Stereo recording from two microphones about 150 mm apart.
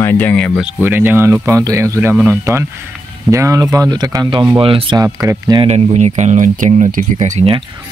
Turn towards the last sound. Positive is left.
turn(degrees=-55)  # may be behind; listen again after turning